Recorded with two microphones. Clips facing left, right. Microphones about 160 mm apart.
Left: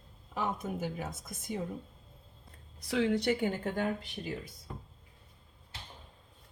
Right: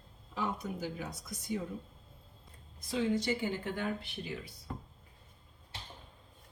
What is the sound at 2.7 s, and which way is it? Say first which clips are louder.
Speech: left 2 dB; 70° left (ahead or behind).